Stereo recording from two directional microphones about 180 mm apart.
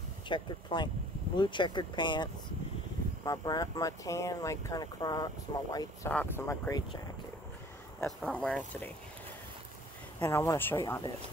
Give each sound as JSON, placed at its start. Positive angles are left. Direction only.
{"t": 0.3, "sound": "speech", "side_deg": 25}
{"t": 3.3, "sound": "speech", "side_deg": 20}
{"t": 8.2, "sound": "speech", "side_deg": 5}
{"t": 10.2, "sound": "speech", "side_deg": 15}